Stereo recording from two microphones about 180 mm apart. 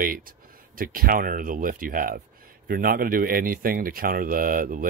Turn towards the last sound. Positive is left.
turn(degrees=-50)  # may be behind; listen again after turning